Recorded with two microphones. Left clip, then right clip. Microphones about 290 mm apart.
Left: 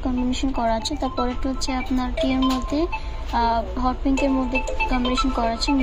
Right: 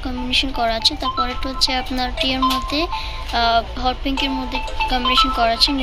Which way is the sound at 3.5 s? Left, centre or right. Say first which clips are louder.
Right 4 dB; centre.